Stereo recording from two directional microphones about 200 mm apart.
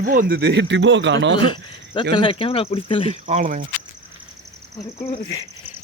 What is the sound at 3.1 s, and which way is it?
Speech, 35° right (ahead or behind).